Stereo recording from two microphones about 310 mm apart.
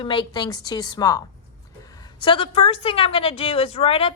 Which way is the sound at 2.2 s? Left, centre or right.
Centre.